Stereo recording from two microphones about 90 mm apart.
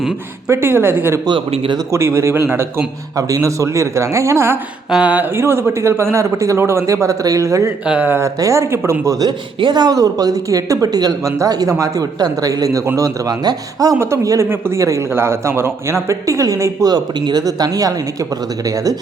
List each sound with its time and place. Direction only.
0.4 s speech: 25° right (ahead or behind)
1.3 s speech: 65° right (ahead or behind)
1.9 s a man's voice: 30° right (ahead or behind)
3.2 s a man's voice: 40° right (ahead or behind)
4.9 s speech: 10° right (ahead or behind)
5.3 s a man's voice: 25° right (ahead or behind)
7.9 s speech: 20° right (ahead or behind)
8.2 s a man's voice: 35° right (ahead or behind)
9.2 s a man's voice: 55° right (ahead or behind)
14.0 s a man's voice: 30° right (ahead or behind)
16.9 s speech: 50° right (ahead or behind)